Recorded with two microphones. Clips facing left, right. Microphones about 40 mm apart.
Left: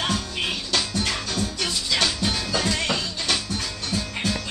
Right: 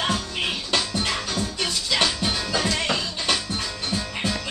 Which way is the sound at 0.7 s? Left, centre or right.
Centre.